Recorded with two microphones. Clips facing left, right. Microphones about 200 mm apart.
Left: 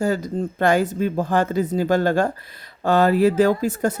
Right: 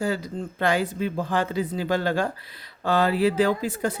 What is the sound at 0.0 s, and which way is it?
Speech, 45° left (ahead or behind).